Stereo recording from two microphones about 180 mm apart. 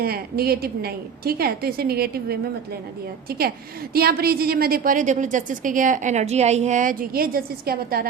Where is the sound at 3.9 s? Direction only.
60° right (ahead or behind).